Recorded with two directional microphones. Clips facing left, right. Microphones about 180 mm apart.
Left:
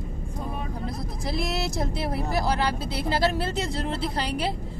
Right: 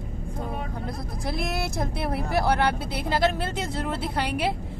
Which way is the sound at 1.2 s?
55° right (ahead or behind).